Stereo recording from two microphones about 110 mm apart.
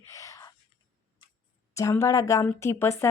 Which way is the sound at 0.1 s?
30° left (ahead or behind).